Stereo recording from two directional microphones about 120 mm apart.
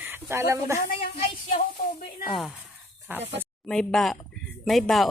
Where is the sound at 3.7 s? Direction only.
5° left (ahead or behind).